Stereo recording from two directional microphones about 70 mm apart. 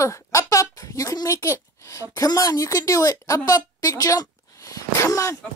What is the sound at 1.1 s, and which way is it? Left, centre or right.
A woman's voice, left.